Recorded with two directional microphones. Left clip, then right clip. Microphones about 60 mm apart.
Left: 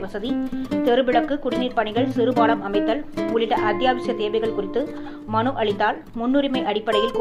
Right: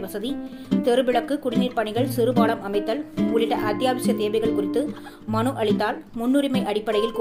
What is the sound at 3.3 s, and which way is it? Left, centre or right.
Speech, right.